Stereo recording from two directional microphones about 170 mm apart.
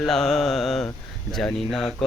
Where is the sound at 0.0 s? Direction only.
5° left (ahead or behind).